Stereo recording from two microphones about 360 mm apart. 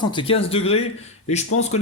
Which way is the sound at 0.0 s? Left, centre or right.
Centre.